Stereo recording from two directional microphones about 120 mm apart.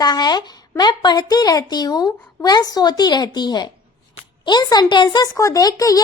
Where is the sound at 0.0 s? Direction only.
35° left (ahead or behind).